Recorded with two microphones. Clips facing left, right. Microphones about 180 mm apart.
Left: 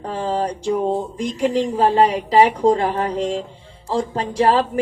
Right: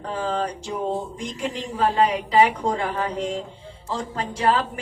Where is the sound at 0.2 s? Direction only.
35° left (ahead or behind).